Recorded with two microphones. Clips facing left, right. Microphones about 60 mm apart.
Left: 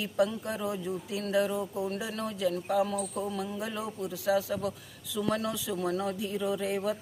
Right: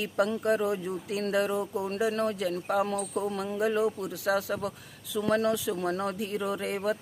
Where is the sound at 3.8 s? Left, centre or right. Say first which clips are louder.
Right 5 dB; right.